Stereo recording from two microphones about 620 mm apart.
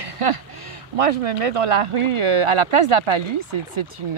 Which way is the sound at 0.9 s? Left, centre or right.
Right.